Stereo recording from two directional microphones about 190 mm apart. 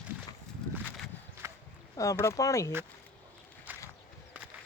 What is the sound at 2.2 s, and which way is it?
Speech, 15° left (ahead or behind).